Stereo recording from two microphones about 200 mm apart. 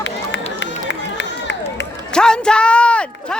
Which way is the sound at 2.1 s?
5° left (ahead or behind).